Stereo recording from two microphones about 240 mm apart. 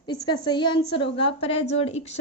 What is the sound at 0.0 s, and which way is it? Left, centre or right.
A woman's voice, centre.